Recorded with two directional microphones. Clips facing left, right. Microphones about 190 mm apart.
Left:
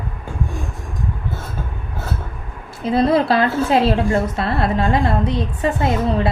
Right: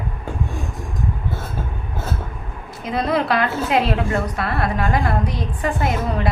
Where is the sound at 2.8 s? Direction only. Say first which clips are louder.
Left 5 dB; 30° left (ahead or behind).